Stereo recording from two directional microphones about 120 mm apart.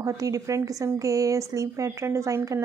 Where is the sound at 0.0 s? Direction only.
25° right (ahead or behind).